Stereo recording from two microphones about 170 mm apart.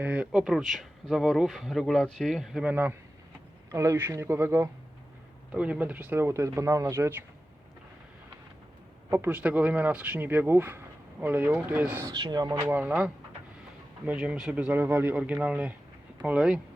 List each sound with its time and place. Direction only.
0.0 s speech: 10° right (ahead or behind)
9.0 s speech: 15° right (ahead or behind)
12.0 s speech: 25° right (ahead or behind)
12.6 s speech: 10° right (ahead or behind)